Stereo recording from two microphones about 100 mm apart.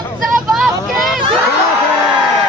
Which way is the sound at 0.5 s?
Centre (ahead or behind).